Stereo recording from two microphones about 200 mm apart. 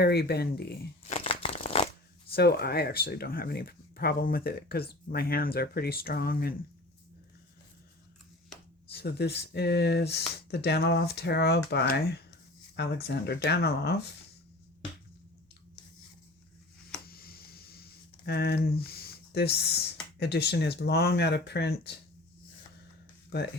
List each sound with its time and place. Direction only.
0.0 s speech: 50° left (ahead or behind)
1.0 s shuffling cards: 30° left (ahead or behind)
2.3 s speech: 50° left (ahead or behind)
8.9 s speech: 55° left (ahead or behind)
17.1 s speech: 50° left (ahead or behind)
23.3 s speech: 55° left (ahead or behind)